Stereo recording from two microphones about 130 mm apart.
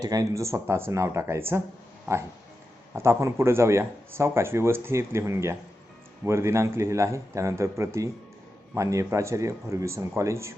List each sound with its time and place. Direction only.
0.0 s speech: 30° right (ahead or behind)
2.9 s speech: 20° right (ahead or behind)